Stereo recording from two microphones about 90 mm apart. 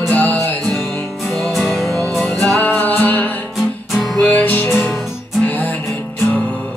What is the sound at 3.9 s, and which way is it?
Music, centre (ahead or behind).